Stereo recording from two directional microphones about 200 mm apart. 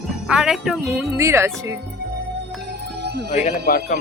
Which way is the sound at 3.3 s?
35° left (ahead or behind).